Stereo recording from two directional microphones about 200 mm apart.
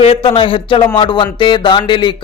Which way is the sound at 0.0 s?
30° left (ahead or behind).